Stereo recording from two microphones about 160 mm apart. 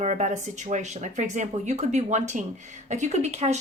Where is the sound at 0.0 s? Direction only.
45° right (ahead or behind).